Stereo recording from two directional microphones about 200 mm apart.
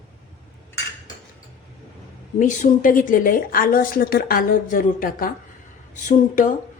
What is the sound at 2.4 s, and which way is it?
A woman's voice, 40° left (ahead or behind).